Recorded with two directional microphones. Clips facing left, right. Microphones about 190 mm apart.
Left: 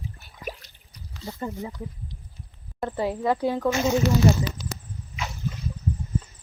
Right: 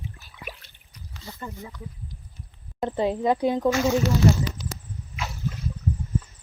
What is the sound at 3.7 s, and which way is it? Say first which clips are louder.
Speech: right 1 dB; 20° left (ahead or behind).